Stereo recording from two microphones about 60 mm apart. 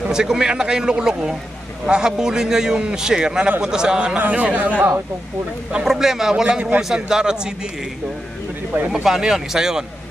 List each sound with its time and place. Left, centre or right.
0.1 s a man's voice: centre
4.3 s speech: right
4.7 s speech: right
5.9 s a man's voice: centre
8.9 s a man's voice: centre